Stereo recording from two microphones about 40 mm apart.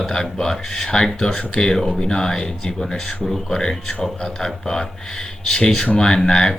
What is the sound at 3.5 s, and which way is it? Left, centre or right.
Speech, centre.